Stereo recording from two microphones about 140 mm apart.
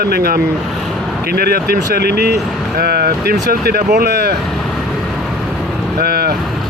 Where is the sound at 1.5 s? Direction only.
90° right.